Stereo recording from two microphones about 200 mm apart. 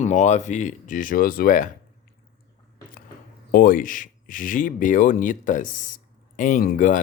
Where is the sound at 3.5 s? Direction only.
45° left (ahead or behind).